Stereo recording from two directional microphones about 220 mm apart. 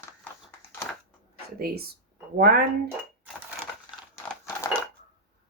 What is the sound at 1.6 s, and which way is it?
Speech, 45° right (ahead or behind).